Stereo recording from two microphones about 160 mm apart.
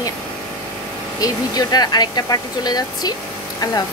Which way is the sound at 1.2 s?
25° left (ahead or behind).